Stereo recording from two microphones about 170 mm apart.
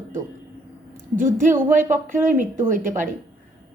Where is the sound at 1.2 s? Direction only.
50° right (ahead or behind).